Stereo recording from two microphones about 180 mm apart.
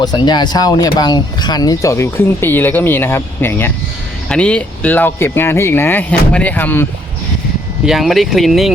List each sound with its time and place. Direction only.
0.0 s speech: 25° left (ahead or behind)
7.9 s speech: centre (ahead or behind)